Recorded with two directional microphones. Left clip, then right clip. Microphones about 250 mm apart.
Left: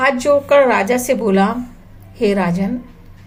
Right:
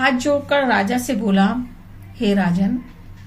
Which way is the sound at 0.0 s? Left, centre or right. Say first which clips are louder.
Left 4 dB; left.